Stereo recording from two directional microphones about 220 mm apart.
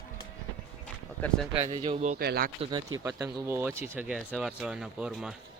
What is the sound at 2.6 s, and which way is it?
Speech, 20° right (ahead or behind).